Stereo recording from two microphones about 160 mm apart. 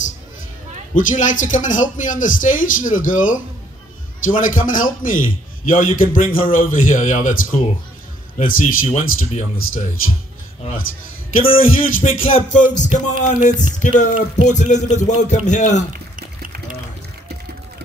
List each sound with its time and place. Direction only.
0.9 s a man's voice: 55° left (ahead or behind)
8.8 s speech: 45° left (ahead or behind)
11.5 s speech: 60° left (ahead or behind)
15.9 s a sound: 60° right (ahead or behind)